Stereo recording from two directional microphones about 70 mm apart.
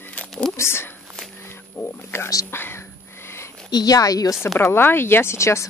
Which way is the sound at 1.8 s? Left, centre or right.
Left.